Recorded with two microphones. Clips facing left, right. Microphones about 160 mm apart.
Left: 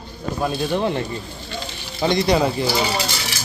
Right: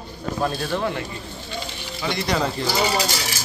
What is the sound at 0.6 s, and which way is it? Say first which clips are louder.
Speech: left 4 dB; 20° left (ahead or behind).